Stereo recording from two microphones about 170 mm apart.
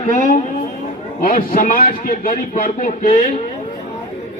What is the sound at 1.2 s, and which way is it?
A man's voice, 55° left (ahead or behind).